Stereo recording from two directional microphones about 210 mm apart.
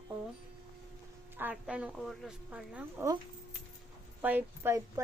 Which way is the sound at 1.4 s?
5° right (ahead or behind).